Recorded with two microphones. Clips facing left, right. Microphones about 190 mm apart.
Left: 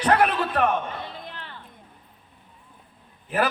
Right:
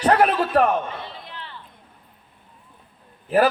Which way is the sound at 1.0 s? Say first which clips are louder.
Even; 45° left (ahead or behind).